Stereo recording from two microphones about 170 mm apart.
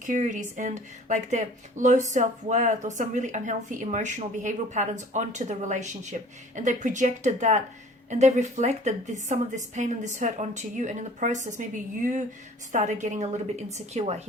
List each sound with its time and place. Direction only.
0.0 s speech: 50° right (ahead or behind)